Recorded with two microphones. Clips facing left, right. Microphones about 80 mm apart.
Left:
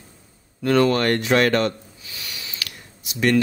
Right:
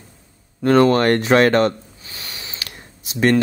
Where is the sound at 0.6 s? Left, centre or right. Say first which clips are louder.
Right 4 dB; right.